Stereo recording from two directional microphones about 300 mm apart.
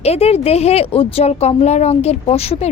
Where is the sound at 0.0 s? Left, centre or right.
Left.